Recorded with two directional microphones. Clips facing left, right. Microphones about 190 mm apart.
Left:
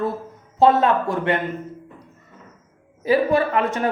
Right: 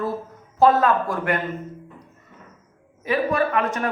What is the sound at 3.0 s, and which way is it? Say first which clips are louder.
Speech: left 4 dB; 30° left (ahead or behind).